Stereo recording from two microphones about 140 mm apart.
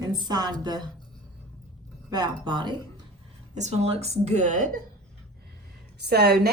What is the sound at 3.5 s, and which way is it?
Speech, 55° right (ahead or behind).